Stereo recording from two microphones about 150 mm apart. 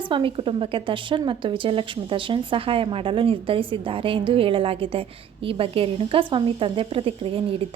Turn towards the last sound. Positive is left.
turn(degrees=-40)  # may be behind; listen again after turning